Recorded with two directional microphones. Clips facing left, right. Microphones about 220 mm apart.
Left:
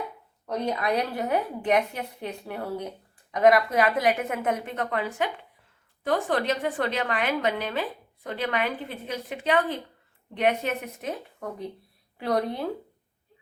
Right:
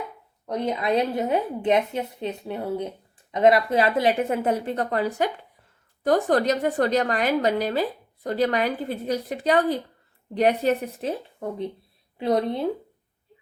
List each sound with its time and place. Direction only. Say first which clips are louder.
0.7 s a woman's voice: right 4 dB; 20° right (ahead or behind)